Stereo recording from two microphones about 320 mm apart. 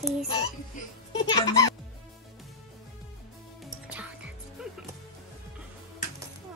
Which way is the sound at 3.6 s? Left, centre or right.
Centre.